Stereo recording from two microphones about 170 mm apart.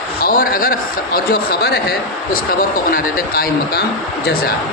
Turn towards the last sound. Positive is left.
turn(degrees=60)  # may be behind; listen again after turning